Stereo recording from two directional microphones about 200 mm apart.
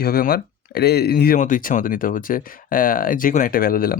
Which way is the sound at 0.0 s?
50° left (ahead or behind).